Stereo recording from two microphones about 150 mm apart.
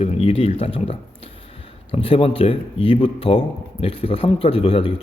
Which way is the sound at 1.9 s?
40° left (ahead or behind).